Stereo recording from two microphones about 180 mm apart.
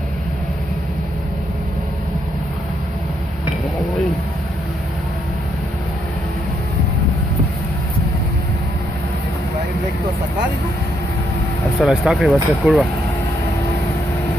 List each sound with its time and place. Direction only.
11.8 s speech: centre (ahead or behind)